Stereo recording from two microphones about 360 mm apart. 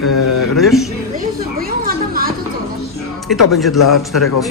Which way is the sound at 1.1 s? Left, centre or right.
Right.